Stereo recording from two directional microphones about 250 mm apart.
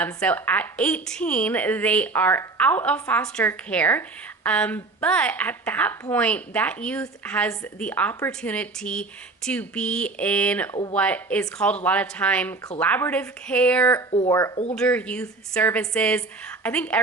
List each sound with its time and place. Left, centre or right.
0.0 s a woman's voice: centre
14.1 s a woman's voice: centre